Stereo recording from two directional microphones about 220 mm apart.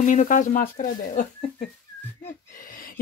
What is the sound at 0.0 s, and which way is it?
Speech, 35° left (ahead or behind).